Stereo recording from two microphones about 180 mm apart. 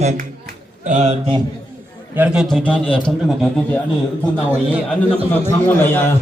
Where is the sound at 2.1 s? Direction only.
10° right (ahead or behind).